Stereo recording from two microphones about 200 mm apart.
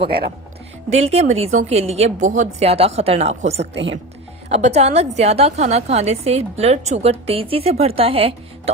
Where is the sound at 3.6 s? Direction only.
65° right (ahead or behind).